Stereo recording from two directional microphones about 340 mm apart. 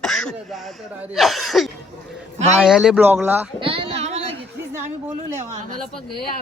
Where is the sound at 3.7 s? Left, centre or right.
Centre.